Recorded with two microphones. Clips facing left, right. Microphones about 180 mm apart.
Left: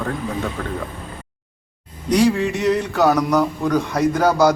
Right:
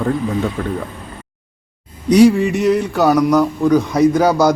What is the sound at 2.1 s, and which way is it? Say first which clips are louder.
A man's voice: right 6 dB; 10° right (ahead or behind).